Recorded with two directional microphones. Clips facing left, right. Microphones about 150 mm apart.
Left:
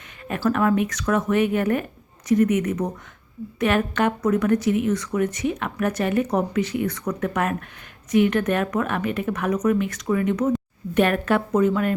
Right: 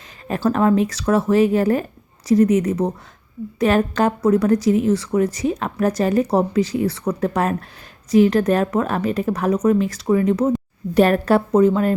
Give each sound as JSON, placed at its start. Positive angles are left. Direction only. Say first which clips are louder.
{"t": 0.3, "sound": "speech", "louder": "right 3 dB", "side_deg": -30}